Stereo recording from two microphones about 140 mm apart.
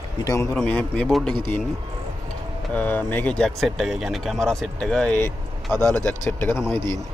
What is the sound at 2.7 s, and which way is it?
Speech, 10° left (ahead or behind).